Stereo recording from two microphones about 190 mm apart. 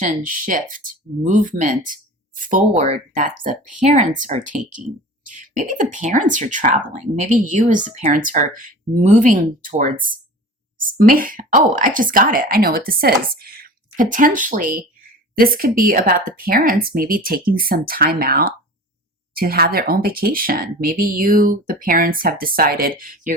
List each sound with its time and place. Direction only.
0.0 s speech: 45° right (ahead or behind)